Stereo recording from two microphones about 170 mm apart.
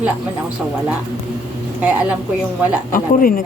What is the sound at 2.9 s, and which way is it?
Speech, 55° left (ahead or behind).